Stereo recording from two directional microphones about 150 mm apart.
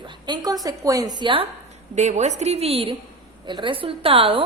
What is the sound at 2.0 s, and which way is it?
A woman's voice, 50° right (ahead or behind).